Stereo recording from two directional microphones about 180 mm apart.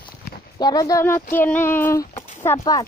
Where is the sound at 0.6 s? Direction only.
20° left (ahead or behind).